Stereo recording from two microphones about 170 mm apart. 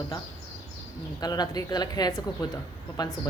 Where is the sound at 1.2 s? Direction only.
25° left (ahead or behind).